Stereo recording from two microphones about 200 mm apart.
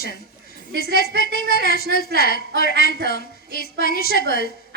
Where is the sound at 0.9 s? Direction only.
50° left (ahead or behind).